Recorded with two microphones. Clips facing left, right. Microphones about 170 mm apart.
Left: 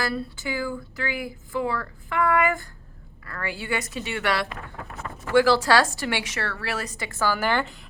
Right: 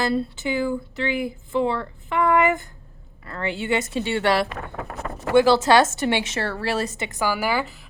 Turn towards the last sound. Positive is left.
turn(degrees=-5)  # may be behind; listen again after turning